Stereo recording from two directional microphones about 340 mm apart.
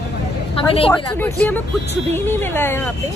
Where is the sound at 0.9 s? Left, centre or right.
Centre.